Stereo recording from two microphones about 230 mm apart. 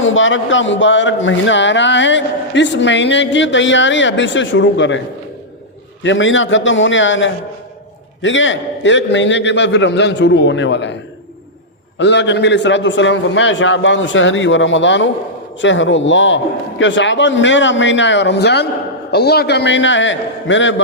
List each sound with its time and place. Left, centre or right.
0.0 s speech: left
6.0 s a man's voice: left
11.9 s speech: left